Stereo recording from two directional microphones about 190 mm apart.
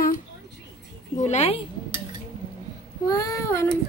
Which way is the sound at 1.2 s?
35° left (ahead or behind).